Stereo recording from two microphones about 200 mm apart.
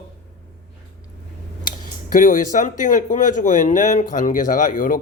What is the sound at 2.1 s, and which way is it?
Speech, 40° left (ahead or behind).